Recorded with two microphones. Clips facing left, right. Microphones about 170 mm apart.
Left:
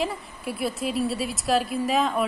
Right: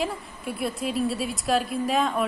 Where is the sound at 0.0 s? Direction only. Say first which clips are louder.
Left 1 dB; centre (ahead or behind).